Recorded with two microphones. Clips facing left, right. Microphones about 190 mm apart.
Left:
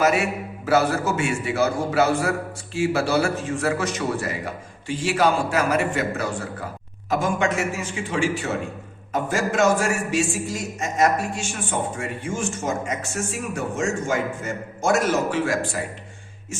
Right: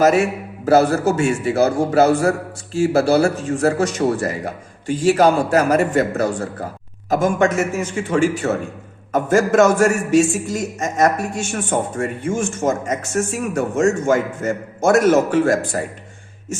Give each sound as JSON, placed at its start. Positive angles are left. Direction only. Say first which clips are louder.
{"t": 0.0, "sound": "a man's voice", "louder": "right 6 dB", "side_deg": -45}